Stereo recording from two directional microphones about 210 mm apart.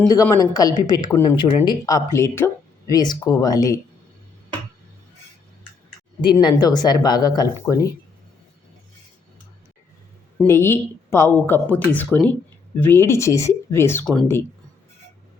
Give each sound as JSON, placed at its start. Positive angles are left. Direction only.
{"t": 0.1, "sound": "speech", "side_deg": 15}
{"t": 6.2, "sound": "speech", "side_deg": 20}
{"t": 10.4, "sound": "speech", "side_deg": 10}